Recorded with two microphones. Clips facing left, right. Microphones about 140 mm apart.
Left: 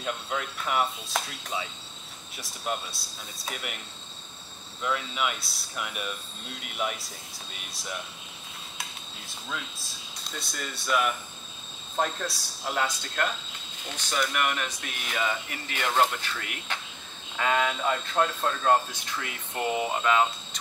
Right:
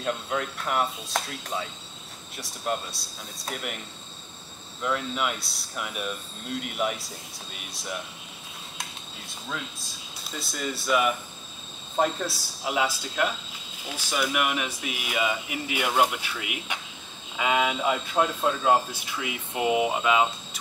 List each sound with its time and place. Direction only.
0.0 s speech: centre (ahead or behind)
4.8 s speech: centre (ahead or behind)
9.3 s speech: centre (ahead or behind)